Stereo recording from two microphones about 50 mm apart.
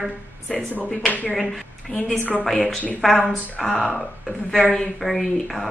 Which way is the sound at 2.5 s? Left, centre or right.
Centre.